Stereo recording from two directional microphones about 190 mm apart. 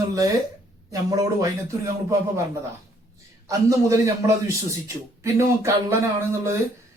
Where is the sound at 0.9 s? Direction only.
15° right (ahead or behind).